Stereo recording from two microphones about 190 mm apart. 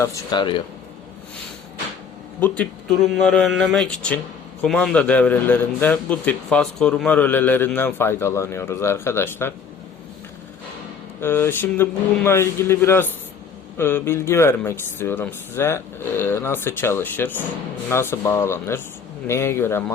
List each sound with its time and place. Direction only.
0.0 s speech: 20° left (ahead or behind)
2.4 s a man's voice: 5° left (ahead or behind)
11.2 s a man's voice: 10° left (ahead or behind)